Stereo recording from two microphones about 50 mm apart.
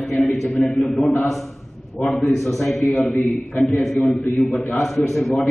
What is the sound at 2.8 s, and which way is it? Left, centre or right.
Speech, left.